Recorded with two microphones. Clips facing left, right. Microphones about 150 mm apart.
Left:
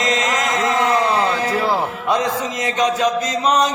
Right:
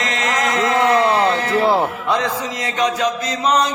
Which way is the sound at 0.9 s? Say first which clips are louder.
Right 2 dB; 30° right (ahead or behind).